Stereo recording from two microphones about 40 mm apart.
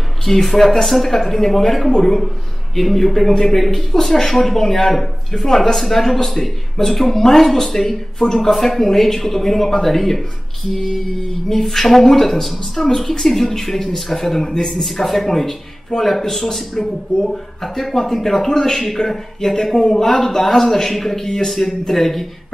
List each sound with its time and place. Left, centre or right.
0.2 s a man's voice: centre
14.8 s a man's voice: centre